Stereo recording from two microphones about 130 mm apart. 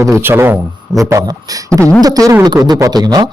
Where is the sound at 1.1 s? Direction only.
30° right (ahead or behind).